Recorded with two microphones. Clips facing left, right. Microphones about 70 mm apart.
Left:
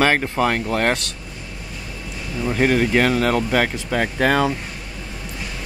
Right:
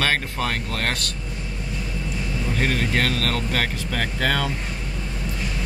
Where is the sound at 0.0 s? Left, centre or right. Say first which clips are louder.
Left 6 dB; centre.